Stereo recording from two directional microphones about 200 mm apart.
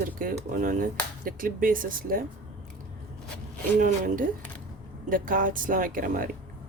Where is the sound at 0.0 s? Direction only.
45° right (ahead or behind).